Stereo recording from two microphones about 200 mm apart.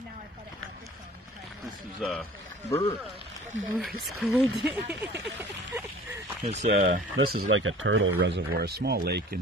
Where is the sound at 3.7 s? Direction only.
Centre (ahead or behind).